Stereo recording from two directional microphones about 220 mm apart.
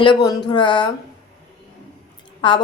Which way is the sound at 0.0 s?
20° left (ahead or behind).